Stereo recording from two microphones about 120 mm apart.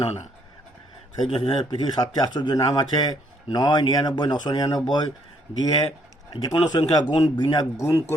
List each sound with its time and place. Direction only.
1.3 s speech: 50° left (ahead or behind)
1.8 s speech: 35° left (ahead or behind)
7.8 s speech: 25° left (ahead or behind)